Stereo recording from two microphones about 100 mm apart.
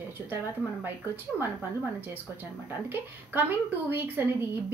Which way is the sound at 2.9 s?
20° right (ahead or behind).